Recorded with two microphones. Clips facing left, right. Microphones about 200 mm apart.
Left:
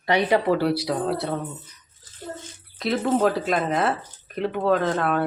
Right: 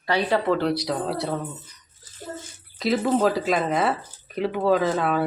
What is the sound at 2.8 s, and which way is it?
Speech, centre (ahead or behind).